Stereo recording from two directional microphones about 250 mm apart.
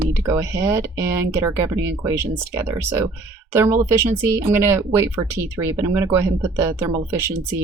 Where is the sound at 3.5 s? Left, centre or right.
Centre.